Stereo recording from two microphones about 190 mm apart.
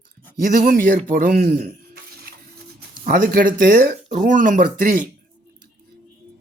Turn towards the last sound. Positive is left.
turn(degrees=-45)  # may be behind; listen again after turning